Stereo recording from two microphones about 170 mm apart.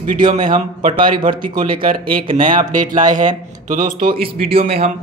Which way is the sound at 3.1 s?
50° right (ahead or behind).